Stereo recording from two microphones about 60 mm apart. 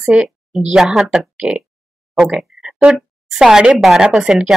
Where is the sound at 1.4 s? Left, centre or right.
Centre.